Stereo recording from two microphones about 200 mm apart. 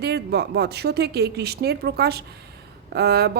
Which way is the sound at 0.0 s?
55° right (ahead or behind).